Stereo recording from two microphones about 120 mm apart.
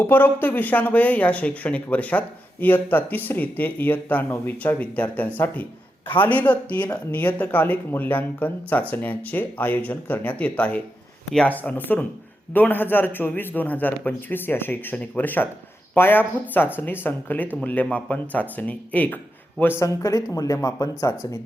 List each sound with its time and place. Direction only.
0.0 s speech: 15° left (ahead or behind)
20.0 s speech: 25° left (ahead or behind)